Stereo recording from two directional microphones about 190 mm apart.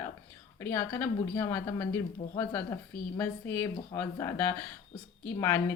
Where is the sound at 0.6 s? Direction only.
15° left (ahead or behind).